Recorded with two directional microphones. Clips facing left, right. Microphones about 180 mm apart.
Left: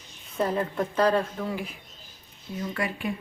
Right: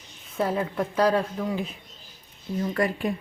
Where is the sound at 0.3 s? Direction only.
5° right (ahead or behind).